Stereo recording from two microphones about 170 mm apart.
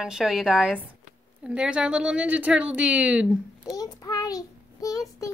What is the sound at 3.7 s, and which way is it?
Child singing, 20° left (ahead or behind).